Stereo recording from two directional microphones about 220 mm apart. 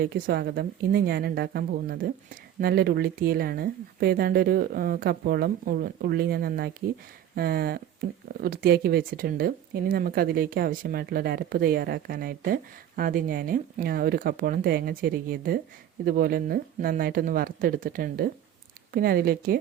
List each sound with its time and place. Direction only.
0.0 s a woman's voice: 45° right (ahead or behind)